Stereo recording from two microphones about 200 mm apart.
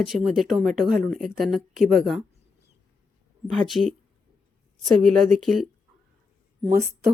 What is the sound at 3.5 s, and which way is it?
Speech, centre (ahead or behind).